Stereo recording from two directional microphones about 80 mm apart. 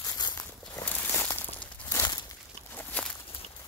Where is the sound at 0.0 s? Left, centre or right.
Left.